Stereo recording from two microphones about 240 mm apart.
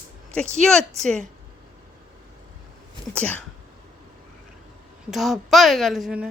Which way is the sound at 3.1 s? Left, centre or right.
Centre.